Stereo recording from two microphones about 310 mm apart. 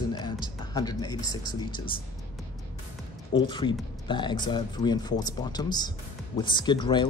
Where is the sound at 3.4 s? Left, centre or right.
Centre.